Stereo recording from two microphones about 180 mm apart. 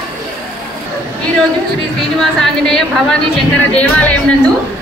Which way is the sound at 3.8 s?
10° left (ahead or behind).